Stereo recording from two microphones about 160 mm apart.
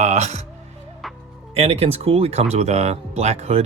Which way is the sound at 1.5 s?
40° right (ahead or behind).